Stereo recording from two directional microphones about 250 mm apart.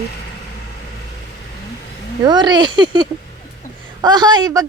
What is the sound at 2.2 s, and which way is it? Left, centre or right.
A woman's voice, centre.